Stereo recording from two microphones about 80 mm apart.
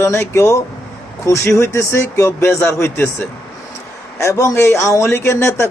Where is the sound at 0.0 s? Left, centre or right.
Left.